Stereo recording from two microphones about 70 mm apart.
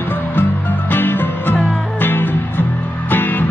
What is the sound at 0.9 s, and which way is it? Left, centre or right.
Music, left.